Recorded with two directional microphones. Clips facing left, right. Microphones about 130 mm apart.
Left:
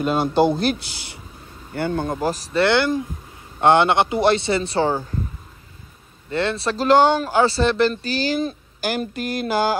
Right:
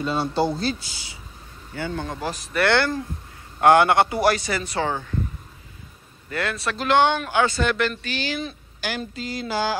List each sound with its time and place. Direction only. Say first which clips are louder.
0.0 s speech: left 5 dB; 55° left (ahead or behind)
2.5 s speech: left 2 dB; 20° left (ahead or behind)
6.3 s speech: left 5 dB; 30° left (ahead or behind)
9.0 s speech: left 5 dB; 55° left (ahead or behind)